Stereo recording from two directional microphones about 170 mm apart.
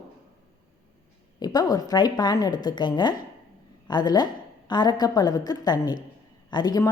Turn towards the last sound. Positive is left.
turn(degrees=25)  # may be behind; listen again after turning